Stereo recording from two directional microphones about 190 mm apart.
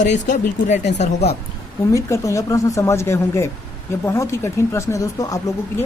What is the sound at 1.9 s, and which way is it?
Speech, 15° left (ahead or behind).